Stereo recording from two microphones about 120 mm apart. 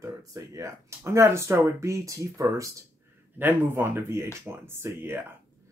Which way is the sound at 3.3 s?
15° right (ahead or behind).